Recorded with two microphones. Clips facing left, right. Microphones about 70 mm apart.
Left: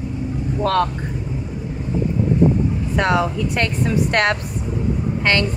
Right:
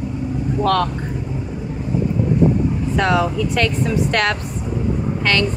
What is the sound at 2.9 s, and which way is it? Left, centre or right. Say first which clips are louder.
Speech: even; left.